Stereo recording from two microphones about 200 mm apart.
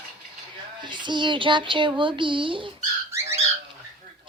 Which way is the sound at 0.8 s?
25° right (ahead or behind).